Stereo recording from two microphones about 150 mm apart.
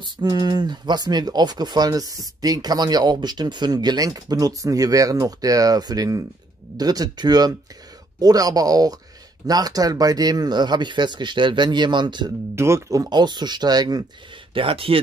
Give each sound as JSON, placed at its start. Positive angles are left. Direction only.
{"t": 0.0, "sound": "speech", "side_deg": -25}
{"t": 12.5, "sound": "speech", "side_deg": -20}
{"t": 14.5, "sound": "speech", "side_deg": -35}